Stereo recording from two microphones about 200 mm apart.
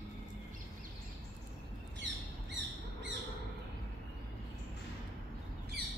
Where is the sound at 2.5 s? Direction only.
65° right (ahead or behind).